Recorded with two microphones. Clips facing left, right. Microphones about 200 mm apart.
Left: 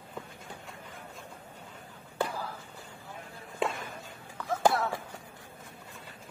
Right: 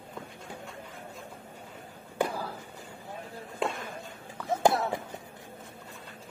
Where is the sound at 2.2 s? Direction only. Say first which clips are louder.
Right 3 dB; 15° right (ahead or behind).